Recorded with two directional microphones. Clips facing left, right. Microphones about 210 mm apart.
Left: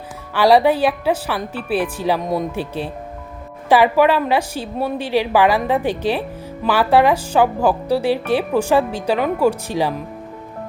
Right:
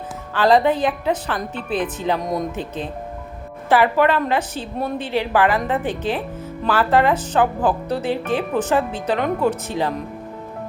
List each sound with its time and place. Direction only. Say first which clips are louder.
0.3 s a woman's voice: left 3 dB; 10° left (ahead or behind)
3.7 s a woman's voice: left 3 dB; 15° left (ahead or behind)